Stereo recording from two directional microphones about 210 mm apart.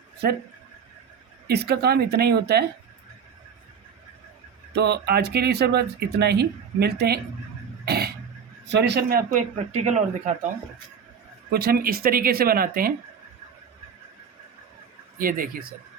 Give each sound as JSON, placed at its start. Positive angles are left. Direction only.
{"t": 1.5, "sound": "speech", "side_deg": -50}
{"t": 4.7, "sound": "speech", "side_deg": -50}
{"t": 7.9, "sound": "throat clearing", "side_deg": -50}
{"t": 8.6, "sound": "speech", "side_deg": -55}
{"t": 11.5, "sound": "speech", "side_deg": -45}
{"t": 15.2, "sound": "speech", "side_deg": -40}